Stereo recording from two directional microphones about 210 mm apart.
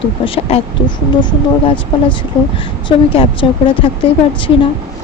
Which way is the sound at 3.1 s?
25° left (ahead or behind).